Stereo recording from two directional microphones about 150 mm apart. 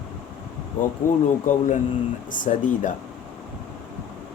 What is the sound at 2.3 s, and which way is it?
Speech, 60° left (ahead or behind).